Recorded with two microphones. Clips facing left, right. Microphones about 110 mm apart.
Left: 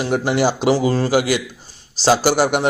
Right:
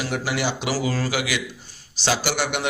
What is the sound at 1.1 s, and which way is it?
A man's voice, 40° left (ahead or behind).